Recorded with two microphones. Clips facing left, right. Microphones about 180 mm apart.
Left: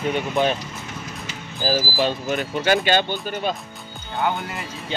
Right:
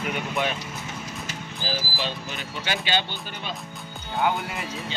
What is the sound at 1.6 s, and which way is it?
Speech, 50° left (ahead or behind).